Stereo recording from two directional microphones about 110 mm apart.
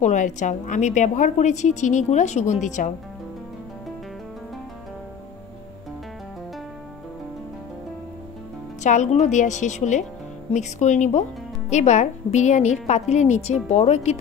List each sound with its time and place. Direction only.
0.0 s a woman's voice: 90° left
8.8 s a woman's voice: 90° left